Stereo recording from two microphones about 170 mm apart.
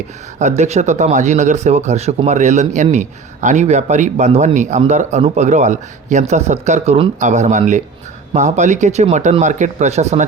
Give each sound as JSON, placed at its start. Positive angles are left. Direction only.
{"t": 0.3, "sound": "speech", "side_deg": -45}